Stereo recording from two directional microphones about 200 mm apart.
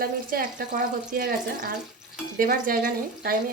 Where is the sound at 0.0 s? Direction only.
45° right (ahead or behind).